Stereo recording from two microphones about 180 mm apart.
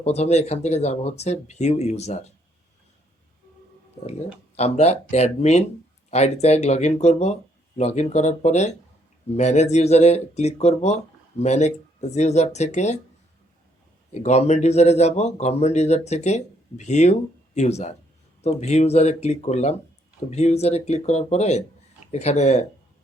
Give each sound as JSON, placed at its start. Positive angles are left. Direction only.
{"t": 0.0, "sound": "a man's voice", "side_deg": 40}
{"t": 4.5, "sound": "a man's voice", "side_deg": 35}
{"t": 14.1, "sound": "a man's voice", "side_deg": 40}